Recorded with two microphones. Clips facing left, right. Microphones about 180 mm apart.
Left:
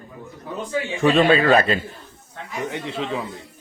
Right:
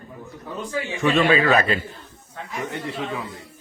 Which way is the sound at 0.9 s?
30° left (ahead or behind).